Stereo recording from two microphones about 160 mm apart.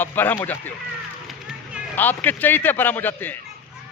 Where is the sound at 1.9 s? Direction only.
10° left (ahead or behind).